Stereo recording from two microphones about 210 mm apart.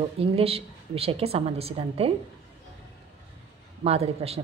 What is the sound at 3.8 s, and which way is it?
Speech, 30° right (ahead or behind).